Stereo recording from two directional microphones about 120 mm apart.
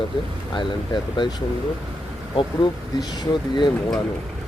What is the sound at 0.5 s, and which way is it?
Speech, 40° left (ahead or behind).